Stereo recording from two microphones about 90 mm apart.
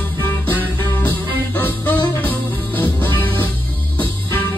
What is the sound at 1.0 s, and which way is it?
Music, 20° left (ahead or behind).